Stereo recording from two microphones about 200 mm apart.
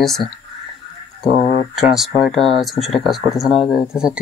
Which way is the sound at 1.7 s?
Centre (ahead or behind).